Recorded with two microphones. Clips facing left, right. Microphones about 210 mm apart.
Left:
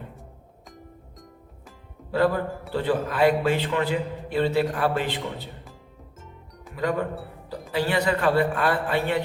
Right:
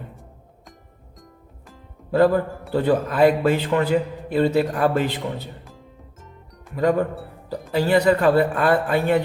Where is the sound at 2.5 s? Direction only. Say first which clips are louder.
Left 1 dB; centre (ahead or behind).